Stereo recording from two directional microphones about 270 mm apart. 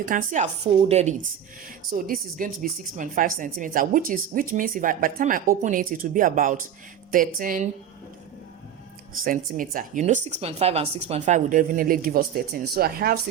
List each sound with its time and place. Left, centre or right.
0.0 s a woman's voice: right
9.2 s a woman's voice: right